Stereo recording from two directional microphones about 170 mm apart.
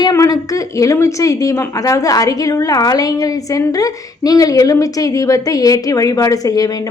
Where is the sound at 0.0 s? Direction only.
20° left (ahead or behind).